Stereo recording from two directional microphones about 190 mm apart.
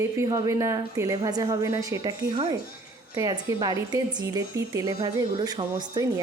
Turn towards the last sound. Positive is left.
turn(degrees=-20)  # may be behind; listen again after turning